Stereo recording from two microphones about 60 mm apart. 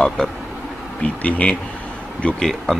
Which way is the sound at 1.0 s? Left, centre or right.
Left.